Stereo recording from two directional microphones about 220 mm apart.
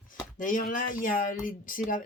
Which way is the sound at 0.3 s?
35° left (ahead or behind).